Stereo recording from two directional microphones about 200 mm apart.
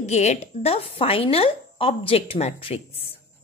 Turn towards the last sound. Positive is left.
turn(degrees=30)  # may be behind; listen again after turning